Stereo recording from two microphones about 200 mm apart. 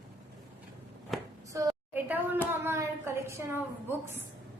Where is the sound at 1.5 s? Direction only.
15° right (ahead or behind).